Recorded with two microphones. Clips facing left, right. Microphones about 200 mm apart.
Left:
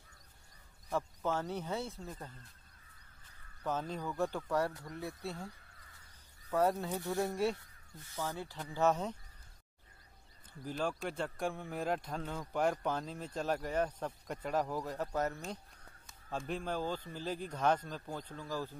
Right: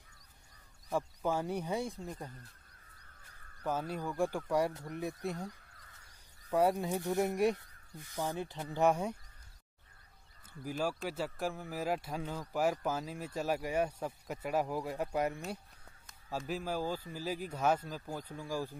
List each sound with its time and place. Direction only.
0.8 s speech: 10° right (ahead or behind)
3.6 s speech: 10° right (ahead or behind)
10.6 s speech: 10° right (ahead or behind)